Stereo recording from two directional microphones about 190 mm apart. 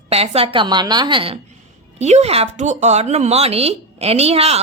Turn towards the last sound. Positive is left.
turn(degrees=-35)  # may be behind; listen again after turning